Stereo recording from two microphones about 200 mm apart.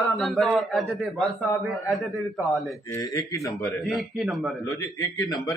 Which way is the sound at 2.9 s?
15° left (ahead or behind).